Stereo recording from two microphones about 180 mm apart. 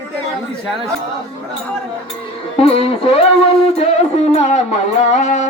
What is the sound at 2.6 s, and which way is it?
Music, 35° left (ahead or behind).